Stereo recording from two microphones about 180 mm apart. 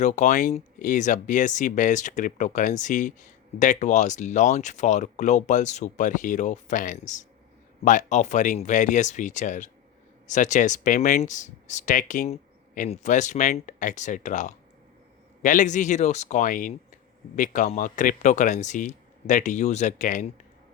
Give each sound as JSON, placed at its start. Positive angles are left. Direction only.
{"t": 0.0, "sound": "speech", "side_deg": 40}